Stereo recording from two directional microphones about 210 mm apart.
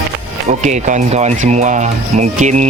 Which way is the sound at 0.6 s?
35° right (ahead or behind).